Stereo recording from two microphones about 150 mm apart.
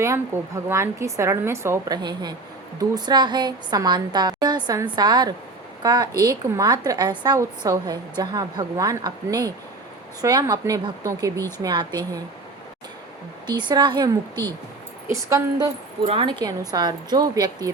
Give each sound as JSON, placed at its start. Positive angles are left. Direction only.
{"t": 0.0, "sound": "a woman's voice", "side_deg": -20}
{"t": 13.5, "sound": "a woman's voice", "side_deg": -30}
{"t": 15.0, "sound": "a woman's voice", "side_deg": -20}
{"t": 16.0, "sound": "a woman's voice", "side_deg": -35}